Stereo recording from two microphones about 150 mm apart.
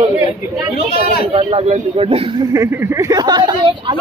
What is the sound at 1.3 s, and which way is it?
Speech, 40° right (ahead or behind).